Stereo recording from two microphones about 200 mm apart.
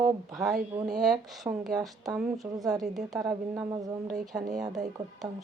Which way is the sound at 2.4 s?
15° right (ahead or behind).